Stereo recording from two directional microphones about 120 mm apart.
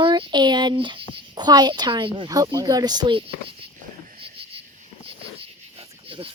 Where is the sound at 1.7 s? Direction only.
40° right (ahead or behind).